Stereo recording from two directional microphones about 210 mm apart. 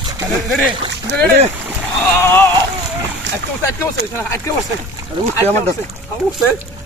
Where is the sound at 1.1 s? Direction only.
55° right (ahead or behind).